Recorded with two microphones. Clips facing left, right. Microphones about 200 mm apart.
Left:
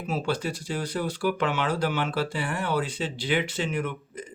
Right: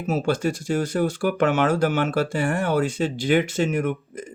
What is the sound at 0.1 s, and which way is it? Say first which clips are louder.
Speech: right 6 dB; 45° right (ahead or behind).